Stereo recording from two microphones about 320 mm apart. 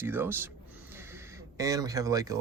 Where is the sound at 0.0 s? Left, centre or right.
Centre.